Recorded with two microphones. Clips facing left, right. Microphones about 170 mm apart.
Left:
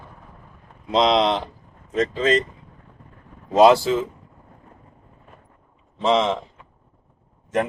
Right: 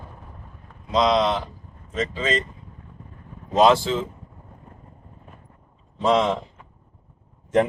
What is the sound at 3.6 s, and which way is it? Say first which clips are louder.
Speech: left 3 dB; 10° left (ahead or behind).